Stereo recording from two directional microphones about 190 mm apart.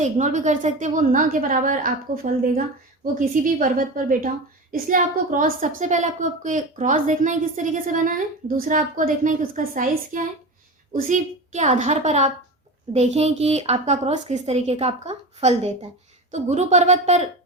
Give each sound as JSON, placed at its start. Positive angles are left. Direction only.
{"t": 0.0, "sound": "a woman's voice", "side_deg": -40}